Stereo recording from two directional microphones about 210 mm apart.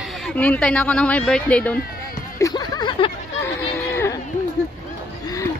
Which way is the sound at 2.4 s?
20° left (ahead or behind).